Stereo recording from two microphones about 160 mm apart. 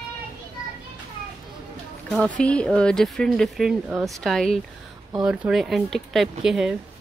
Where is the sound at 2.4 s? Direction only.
5° left (ahead or behind).